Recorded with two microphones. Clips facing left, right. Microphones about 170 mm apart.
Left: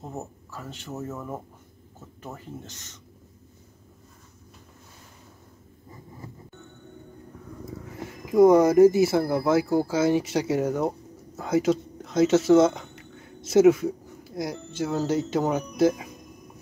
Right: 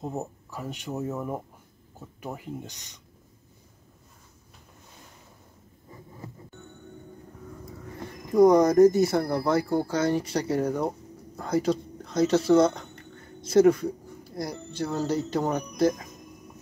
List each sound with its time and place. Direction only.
0.0 s speech: 15° right (ahead or behind)
7.9 s speech: 5° left (ahead or behind)
11.3 s a sound: 5° left (ahead or behind)
13.5 s speech: 5° left (ahead or behind)